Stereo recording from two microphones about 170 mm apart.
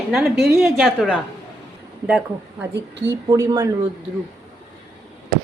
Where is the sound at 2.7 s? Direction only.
90° right.